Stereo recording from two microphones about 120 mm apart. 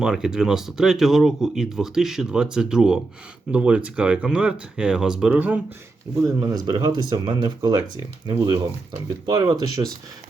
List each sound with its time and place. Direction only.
0.0 s speech: 5° right (ahead or behind)
6.1 s speech: 25° right (ahead or behind)
6.4 s speech: 35° right (ahead or behind)